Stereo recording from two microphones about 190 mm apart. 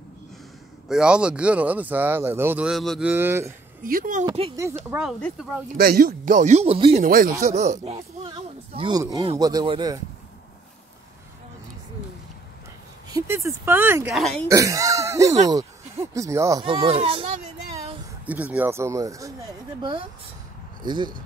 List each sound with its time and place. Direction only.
0.8 s speech: 5° right (ahead or behind)
3.8 s speech: 45° right (ahead or behind)
4.3 s speech: 25° right (ahead or behind)
4.8 s speech: 5° right (ahead or behind)
5.8 s speech: 50° right (ahead or behind); by 7.0 s 30° right (ahead or behind)
7.0 s speech: 50° right (ahead or behind)
7.4 s speech: 35° right (ahead or behind); by 9.9 s 20° right (ahead or behind)
13.1 s speech: 15° right (ahead or behind)
14.1 s speech: centre (ahead or behind)
14.5 s speech: 15° right (ahead or behind)
16.6 s speech: 30° right (ahead or behind)
17.7 s speech: 10° right (ahead or behind)